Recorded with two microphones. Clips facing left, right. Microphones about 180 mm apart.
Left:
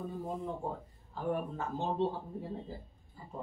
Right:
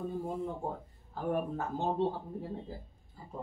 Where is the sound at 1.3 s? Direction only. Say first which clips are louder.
Right 3 dB; 50° right (ahead or behind).